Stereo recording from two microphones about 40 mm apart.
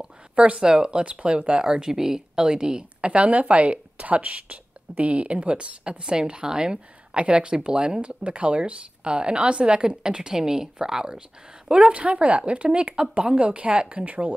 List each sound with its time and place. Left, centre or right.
0.4 s speech: right
11.7 s speech: right